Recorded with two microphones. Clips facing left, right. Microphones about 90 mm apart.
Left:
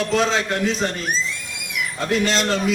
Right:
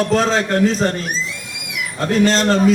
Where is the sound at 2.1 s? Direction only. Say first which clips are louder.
Right 6 dB; 40° right (ahead or behind).